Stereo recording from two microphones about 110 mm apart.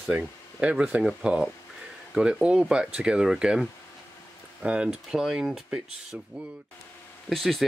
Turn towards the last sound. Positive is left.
turn(degrees=0)  # may be behind; listen again after turning